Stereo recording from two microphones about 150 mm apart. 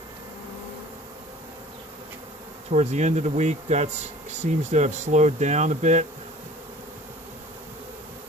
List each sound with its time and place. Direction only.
2.6 s speech: 50° right (ahead or behind)